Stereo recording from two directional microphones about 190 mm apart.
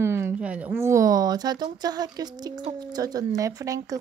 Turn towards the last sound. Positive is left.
turn(degrees=-20)  # may be behind; listen again after turning